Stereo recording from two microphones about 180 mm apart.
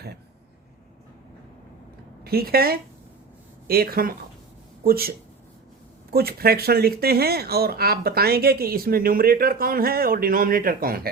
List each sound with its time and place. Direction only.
2.2 s speech: 60° right (ahead or behind)